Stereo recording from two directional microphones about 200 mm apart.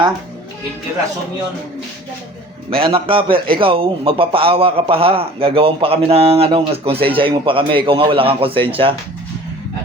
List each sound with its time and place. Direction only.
2.6 s a man's voice: 25° right (ahead or behind)